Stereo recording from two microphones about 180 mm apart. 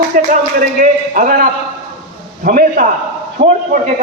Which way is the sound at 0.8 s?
45° right (ahead or behind).